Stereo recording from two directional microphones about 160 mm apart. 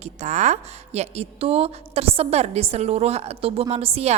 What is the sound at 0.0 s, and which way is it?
A woman's voice, 45° right (ahead or behind).